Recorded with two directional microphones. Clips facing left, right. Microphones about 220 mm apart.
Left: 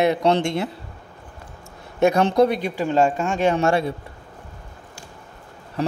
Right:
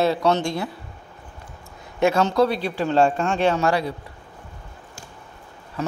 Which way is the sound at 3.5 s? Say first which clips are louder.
Left 2 dB; 25° left (ahead or behind).